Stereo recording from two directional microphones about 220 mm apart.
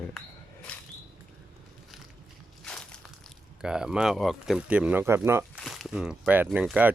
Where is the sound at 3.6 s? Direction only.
5° right (ahead or behind).